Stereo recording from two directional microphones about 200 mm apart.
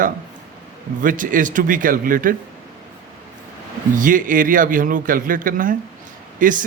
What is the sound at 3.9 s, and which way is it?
A man's voice, 40° right (ahead or behind).